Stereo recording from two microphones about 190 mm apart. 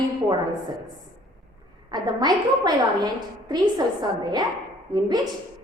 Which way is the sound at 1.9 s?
20° right (ahead or behind).